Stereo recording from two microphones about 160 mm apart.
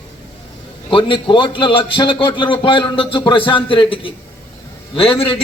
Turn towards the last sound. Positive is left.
turn(degrees=35)  # may be behind; listen again after turning